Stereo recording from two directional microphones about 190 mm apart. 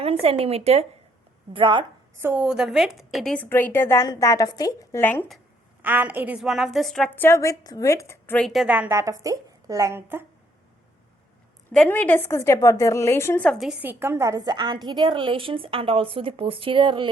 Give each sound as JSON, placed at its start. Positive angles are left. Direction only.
{"t": 0.0, "sound": "a woman's voice", "side_deg": -30}
{"t": 2.2, "sound": "a woman's voice", "side_deg": -10}
{"t": 5.8, "sound": "a woman's voice", "side_deg": -10}
{"t": 11.7, "sound": "a woman's voice", "side_deg": 5}
{"t": 14.0, "sound": "a woman's voice", "side_deg": -15}